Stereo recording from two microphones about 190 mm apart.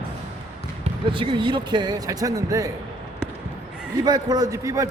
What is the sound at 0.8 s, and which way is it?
A man's voice, 25° right (ahead or behind).